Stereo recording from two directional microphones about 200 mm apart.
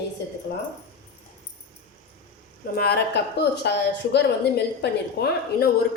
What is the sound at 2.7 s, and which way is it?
A woman's voice, 50° left (ahead or behind).